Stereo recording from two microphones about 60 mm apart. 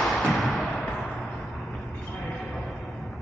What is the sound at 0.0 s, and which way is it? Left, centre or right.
Music, centre.